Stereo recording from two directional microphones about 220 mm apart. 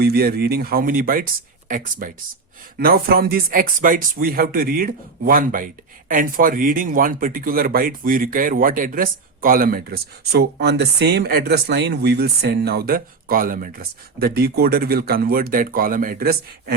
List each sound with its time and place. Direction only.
0.0 s speech: 45° right (ahead or behind)